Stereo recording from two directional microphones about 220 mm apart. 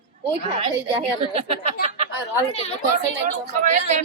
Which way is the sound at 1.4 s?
30° right (ahead or behind).